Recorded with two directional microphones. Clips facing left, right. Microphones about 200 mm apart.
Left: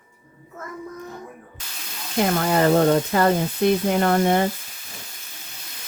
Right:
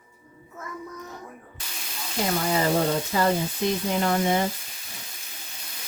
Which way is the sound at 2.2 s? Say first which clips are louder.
Left 5 dB; 60° left (ahead or behind).